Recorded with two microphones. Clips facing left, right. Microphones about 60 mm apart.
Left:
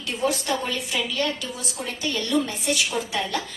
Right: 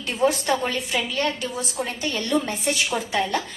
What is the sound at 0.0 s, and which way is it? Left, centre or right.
A woman's voice, right.